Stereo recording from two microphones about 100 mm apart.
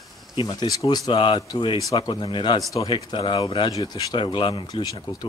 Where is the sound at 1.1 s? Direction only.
55° left (ahead or behind).